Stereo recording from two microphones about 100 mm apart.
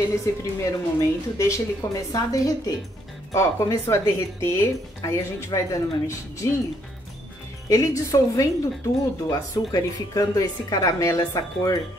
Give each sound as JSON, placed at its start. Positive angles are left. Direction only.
{"t": 0.2, "sound": "a woman's voice", "side_deg": 35}
{"t": 7.6, "sound": "a woman's voice", "side_deg": 35}